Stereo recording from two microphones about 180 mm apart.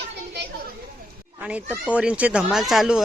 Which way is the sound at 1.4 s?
5° right (ahead or behind).